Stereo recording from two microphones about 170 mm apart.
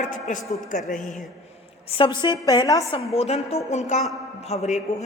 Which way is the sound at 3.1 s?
40° left (ahead or behind).